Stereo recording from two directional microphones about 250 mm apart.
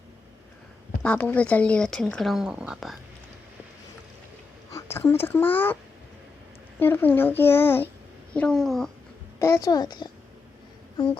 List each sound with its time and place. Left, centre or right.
1.0 s speech: centre
4.7 s a child's voice: centre
6.7 s a child's voice: centre
9.4 s a child's voice: centre